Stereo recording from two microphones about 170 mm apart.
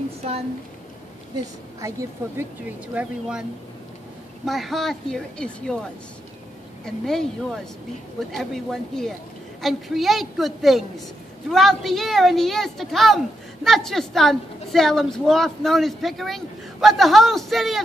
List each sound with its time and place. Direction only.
1.4 s a woman's voice: 20° right (ahead or behind)
2.9 s speech: 5° right (ahead or behind)
4.5 s a woman's voice: centre (ahead or behind)